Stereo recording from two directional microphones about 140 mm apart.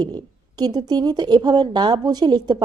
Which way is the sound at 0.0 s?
30° right (ahead or behind).